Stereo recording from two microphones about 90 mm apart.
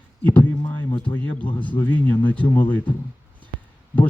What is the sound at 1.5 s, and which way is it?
Speech, 65° left (ahead or behind).